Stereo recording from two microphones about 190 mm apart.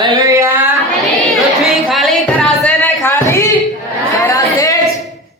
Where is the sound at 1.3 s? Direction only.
Centre (ahead or behind); by 3.5 s 15° left (ahead or behind).